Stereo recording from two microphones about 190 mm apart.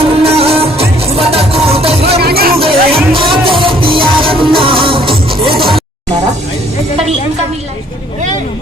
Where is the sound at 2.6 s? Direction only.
30° right (ahead or behind).